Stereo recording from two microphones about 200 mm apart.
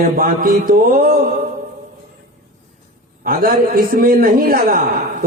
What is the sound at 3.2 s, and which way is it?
A man's voice, 45° right (ahead or behind).